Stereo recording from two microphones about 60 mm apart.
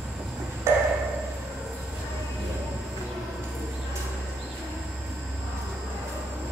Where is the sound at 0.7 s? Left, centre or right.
Right.